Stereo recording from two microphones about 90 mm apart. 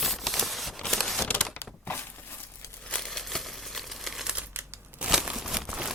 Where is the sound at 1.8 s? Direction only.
25° left (ahead or behind).